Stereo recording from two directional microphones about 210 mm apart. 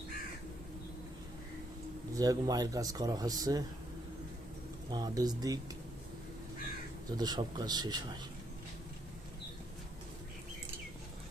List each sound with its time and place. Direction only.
2.1 s speech: 15° right (ahead or behind)
4.9 s speech: 20° right (ahead or behind)
7.2 s speech: 20° right (ahead or behind)